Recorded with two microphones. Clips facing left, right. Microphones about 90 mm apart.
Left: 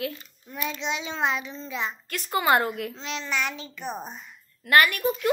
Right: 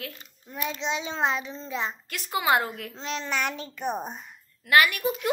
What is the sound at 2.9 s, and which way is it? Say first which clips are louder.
Speech: even; 40° right (ahead or behind).